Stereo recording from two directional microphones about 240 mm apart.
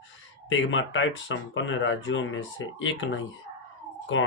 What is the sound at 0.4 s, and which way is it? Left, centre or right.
Speech, left.